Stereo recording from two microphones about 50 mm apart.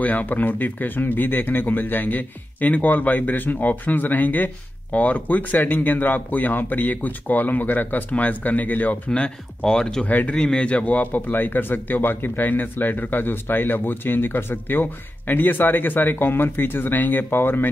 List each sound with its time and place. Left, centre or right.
0.0 s speech: left
9.6 s speech: centre
10.0 s speech: left
10.3 s speech: centre; by 17.6 s left